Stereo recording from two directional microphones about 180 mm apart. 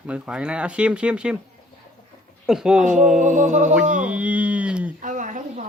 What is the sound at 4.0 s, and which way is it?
Speech, 5° right (ahead or behind).